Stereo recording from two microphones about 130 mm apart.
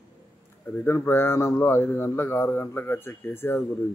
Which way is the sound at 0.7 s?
20° left (ahead or behind).